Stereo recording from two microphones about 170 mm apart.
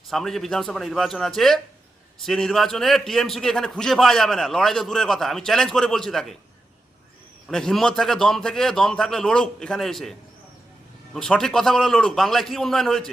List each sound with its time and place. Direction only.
0.1 s a man's voice: centre (ahead or behind)
7.4 s a man's voice: centre (ahead or behind)